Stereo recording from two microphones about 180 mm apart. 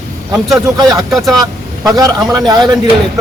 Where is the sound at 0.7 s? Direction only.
20° right (ahead or behind).